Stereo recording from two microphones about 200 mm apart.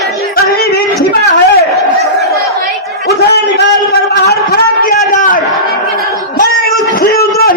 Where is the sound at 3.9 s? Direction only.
55° left (ahead or behind).